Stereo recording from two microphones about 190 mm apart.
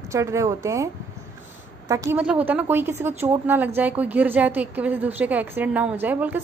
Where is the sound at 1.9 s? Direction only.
15° right (ahead or behind).